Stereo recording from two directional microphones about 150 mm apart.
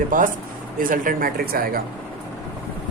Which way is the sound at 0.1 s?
60° right (ahead or behind).